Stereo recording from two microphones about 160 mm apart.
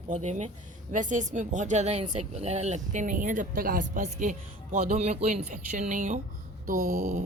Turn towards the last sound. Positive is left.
turn(degrees=-45)  # may be behind; listen again after turning